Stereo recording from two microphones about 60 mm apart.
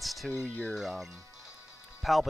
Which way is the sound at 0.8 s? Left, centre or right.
Centre.